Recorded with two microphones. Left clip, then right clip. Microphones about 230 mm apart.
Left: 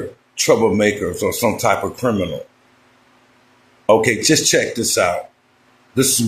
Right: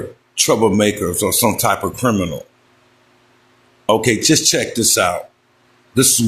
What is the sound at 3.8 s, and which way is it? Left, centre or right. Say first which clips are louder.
Speech: left 1 dB; right.